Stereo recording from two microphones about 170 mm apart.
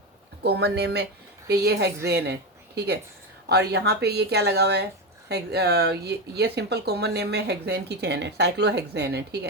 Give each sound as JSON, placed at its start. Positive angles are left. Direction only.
{"t": 0.4, "sound": "speech", "side_deg": -75}